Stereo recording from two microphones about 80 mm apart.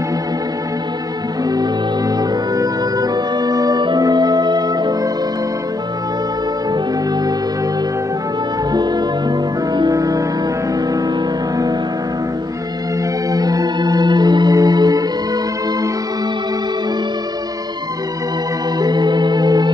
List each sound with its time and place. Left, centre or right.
2.5 s music: right
8.7 s music: right
13.3 s music: right
18.8 s music: right